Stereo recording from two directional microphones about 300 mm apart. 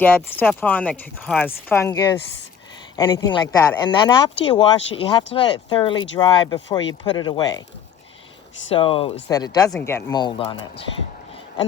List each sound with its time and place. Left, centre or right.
0.0 s speech: centre
8.7 s speech: centre